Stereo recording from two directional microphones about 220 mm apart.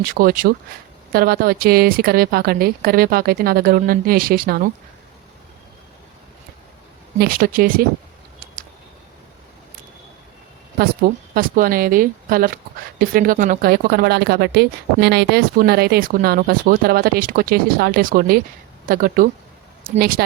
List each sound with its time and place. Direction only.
0.0 s speech: 40° right (ahead or behind)
7.2 s speech: 40° right (ahead or behind)
11.0 s speech: 45° right (ahead or behind)